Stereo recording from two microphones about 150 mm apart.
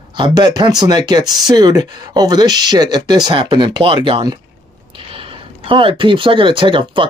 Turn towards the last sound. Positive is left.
turn(degrees=-35)  # may be behind; listen again after turning